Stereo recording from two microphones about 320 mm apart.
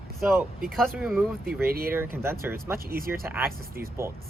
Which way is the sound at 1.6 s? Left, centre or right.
Right.